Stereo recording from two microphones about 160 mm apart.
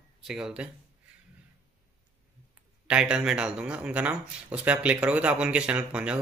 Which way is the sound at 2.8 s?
5° right (ahead or behind).